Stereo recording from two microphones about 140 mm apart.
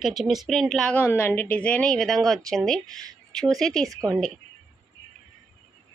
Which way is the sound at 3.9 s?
25° right (ahead or behind).